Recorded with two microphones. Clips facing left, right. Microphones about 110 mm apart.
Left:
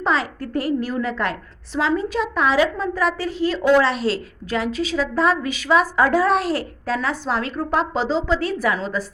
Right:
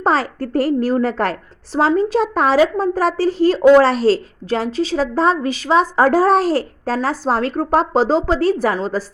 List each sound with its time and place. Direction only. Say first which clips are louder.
0.0 s a woman's voice: right 4 dB; 40° right (ahead or behind)